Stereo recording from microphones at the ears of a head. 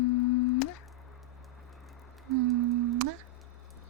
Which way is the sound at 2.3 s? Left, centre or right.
Right.